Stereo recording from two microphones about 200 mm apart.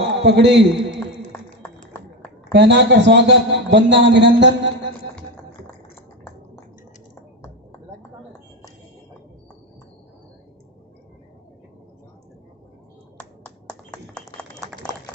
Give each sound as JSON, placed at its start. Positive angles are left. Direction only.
{"t": 0.3, "sound": "a man's voice", "side_deg": -60}
{"t": 2.5, "sound": "a man's voice", "side_deg": -60}
{"t": 13.1, "sound": "finger snapping", "side_deg": 5}